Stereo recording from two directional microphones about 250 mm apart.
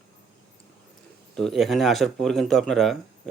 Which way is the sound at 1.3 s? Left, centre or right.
Centre.